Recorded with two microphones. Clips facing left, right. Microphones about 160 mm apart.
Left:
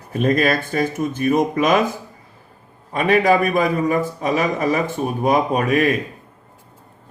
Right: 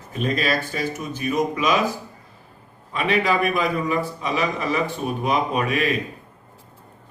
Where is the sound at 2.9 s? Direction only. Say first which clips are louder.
Left 5 dB; 45° left (ahead or behind).